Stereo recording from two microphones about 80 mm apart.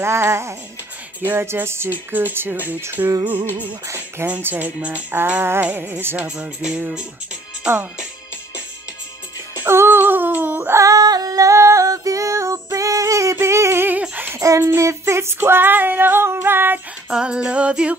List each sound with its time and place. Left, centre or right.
0.0 s music: right
1.2 s female singing: right
3.8 s speech: right
4.3 s female singing: right
4.7 s music: centre
5.1 s female singing: right
6.2 s music: centre
9.6 s a sound: right
10.7 s female singing: right
12.7 s music: right
14.1 s a sound: right
14.4 s child singing: right
14.7 s female singing: right
17.1 s music: centre